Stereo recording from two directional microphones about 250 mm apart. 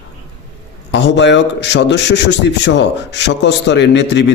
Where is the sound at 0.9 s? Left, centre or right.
Left.